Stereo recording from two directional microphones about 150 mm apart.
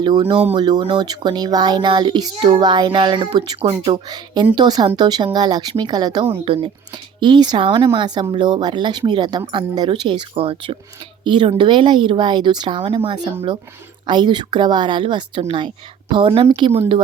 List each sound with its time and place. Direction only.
0.0 s a woman's voice: 30° right (ahead or behind)